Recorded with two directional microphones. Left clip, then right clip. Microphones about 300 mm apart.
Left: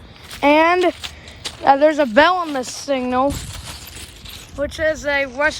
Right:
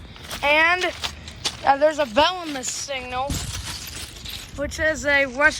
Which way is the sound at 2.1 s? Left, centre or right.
Left.